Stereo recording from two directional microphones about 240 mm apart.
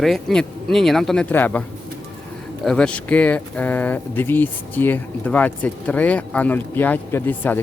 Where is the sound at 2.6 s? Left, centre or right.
Centre.